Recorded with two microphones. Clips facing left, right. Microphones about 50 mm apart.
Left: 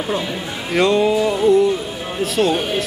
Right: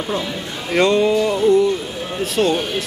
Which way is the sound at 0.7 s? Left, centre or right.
Centre.